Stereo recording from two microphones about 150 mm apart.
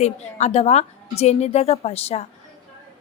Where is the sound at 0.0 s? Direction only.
45° left (ahead or behind).